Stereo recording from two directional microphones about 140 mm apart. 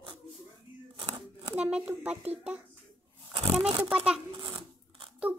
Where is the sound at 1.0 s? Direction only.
35° right (ahead or behind).